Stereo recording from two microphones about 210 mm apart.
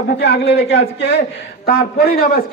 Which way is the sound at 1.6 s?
45° left (ahead or behind).